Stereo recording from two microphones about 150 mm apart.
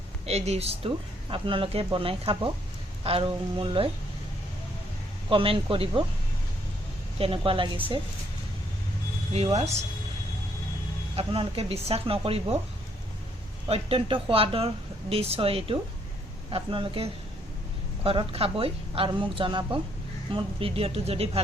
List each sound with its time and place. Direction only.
0.3 s speech: 45° right (ahead or behind)
5.3 s speech: 35° right (ahead or behind)
7.2 s speech: 35° right (ahead or behind)
9.3 s speech: 45° right (ahead or behind)
11.1 s speech: 40° right (ahead or behind)
13.7 s speech: 40° right (ahead or behind)